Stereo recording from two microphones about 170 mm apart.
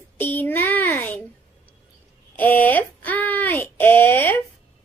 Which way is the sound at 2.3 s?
10° left (ahead or behind).